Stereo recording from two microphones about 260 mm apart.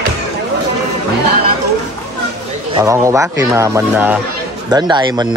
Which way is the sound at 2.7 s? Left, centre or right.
Centre.